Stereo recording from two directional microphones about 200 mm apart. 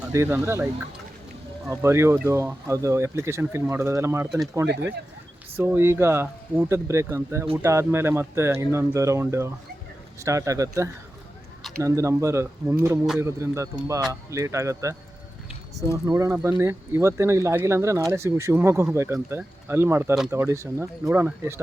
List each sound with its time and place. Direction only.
0.1 s speech: 15° right (ahead or behind)
1.7 s speech: 15° right (ahead or behind)
16.0 s speech: 15° right (ahead or behind)